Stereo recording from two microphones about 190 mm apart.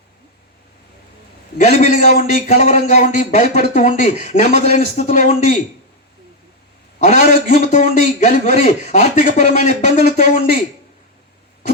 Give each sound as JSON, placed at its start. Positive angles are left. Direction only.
{"t": 1.5, "sound": "a man's voice", "side_deg": 35}
{"t": 7.0, "sound": "a man's voice", "side_deg": 40}